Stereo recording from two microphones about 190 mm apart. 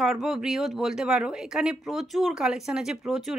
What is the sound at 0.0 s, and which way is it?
Speech, centre (ahead or behind).